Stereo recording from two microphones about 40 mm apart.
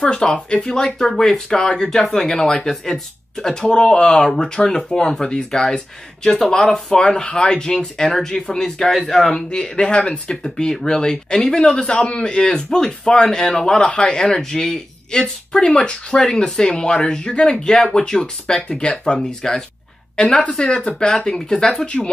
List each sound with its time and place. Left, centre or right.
0.0 s speech: left
9.5 s speech: left
19.1 s speech: centre
21.8 s speech: left